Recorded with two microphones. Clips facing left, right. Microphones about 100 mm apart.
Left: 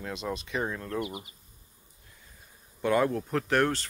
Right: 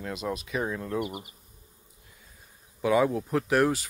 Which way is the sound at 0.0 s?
5° right (ahead or behind).